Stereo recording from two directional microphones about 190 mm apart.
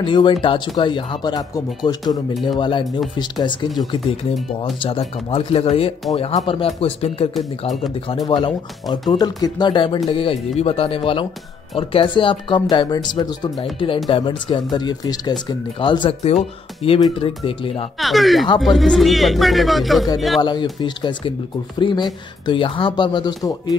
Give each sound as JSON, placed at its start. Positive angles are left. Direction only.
{"t": 0.0, "sound": "speech", "side_deg": 25}
{"t": 8.3, "sound": "speech", "side_deg": 25}
{"t": 17.9, "sound": "speech", "side_deg": 0}
{"t": 20.8, "sound": "speech", "side_deg": 25}